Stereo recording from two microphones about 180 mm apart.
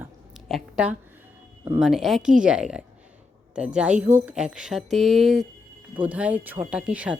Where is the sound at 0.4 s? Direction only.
5° right (ahead or behind).